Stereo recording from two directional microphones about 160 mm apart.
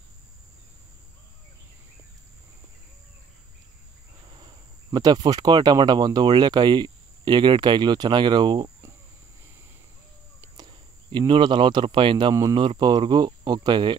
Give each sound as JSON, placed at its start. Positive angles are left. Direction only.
{"t": 4.9, "sound": "speech", "side_deg": -25}
{"t": 10.6, "sound": "speech", "side_deg": -30}